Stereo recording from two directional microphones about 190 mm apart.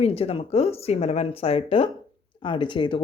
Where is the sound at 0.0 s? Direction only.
30° left (ahead or behind).